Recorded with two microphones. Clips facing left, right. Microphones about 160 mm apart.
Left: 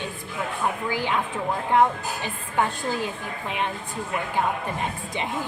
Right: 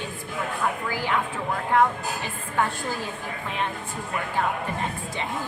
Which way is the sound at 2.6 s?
20° left (ahead or behind).